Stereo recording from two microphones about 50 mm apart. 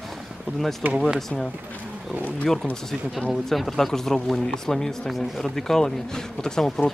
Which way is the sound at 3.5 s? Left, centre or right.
Centre.